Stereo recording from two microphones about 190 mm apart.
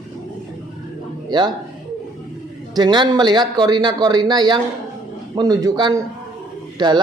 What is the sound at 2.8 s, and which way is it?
A man's voice, 20° right (ahead or behind).